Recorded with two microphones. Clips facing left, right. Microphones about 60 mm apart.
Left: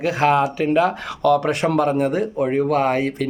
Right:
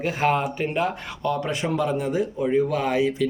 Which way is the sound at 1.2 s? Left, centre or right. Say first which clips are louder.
Left 8 dB; left.